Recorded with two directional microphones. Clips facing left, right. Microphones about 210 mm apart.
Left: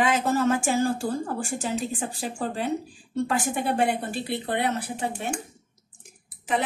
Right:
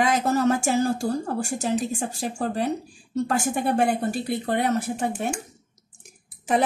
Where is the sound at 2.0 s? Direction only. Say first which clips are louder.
Right 2 dB; 45° right (ahead or behind).